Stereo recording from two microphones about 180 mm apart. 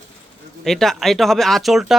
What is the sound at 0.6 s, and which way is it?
Speech, centre (ahead or behind).